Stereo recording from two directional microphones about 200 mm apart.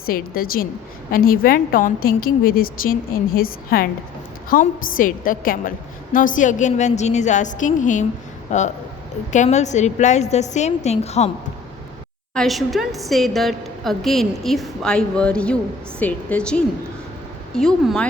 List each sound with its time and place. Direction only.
0.0 s a woman's voice: 45° left (ahead or behind)
12.3 s a woman's voice: centre (ahead or behind)